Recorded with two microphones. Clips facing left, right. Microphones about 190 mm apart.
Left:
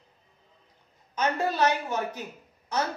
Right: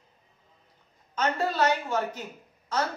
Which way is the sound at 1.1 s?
15° left (ahead or behind).